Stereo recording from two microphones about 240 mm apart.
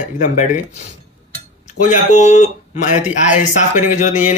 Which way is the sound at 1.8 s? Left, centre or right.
Left.